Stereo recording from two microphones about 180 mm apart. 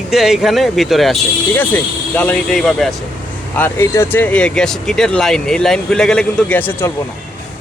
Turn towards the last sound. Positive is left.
turn(degrees=10)  # may be behind; listen again after turning